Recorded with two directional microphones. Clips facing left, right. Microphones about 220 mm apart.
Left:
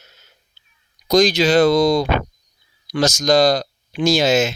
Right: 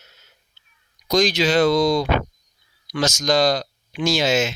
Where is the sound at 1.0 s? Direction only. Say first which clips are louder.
Left 4 dB; 35° left (ahead or behind).